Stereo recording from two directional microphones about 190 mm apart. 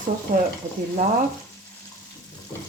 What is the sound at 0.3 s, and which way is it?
Stir, 50° right (ahead or behind).